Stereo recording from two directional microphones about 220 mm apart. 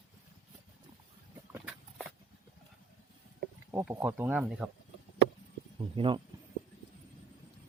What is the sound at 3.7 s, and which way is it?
Speech, 10° right (ahead or behind).